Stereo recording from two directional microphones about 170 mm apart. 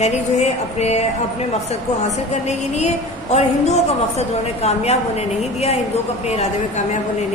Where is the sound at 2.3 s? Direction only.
40° left (ahead or behind).